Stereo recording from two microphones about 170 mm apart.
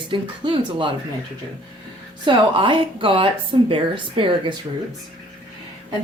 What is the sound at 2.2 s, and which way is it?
Speech, 30° right (ahead or behind).